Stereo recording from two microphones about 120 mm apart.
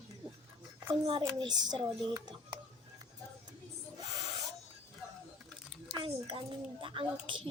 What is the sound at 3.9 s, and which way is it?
Owl, 30° right (ahead or behind).